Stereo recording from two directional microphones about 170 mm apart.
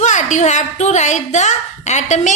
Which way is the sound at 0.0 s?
45° left (ahead or behind).